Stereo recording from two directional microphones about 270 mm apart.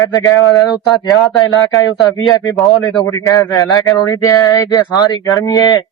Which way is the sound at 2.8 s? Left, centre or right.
Centre.